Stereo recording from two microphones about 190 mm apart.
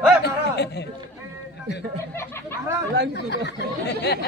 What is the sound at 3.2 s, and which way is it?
A man's voice, 65° left (ahead or behind).